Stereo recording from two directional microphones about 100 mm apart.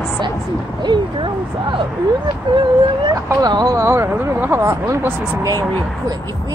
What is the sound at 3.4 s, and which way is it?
Speech, 40° right (ahead or behind).